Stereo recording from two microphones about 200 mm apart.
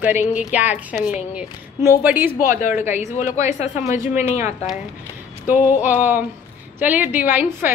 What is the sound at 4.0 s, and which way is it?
Speech, 10° right (ahead or behind).